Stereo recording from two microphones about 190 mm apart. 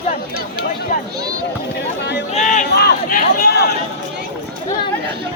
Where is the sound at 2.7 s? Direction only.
50° left (ahead or behind).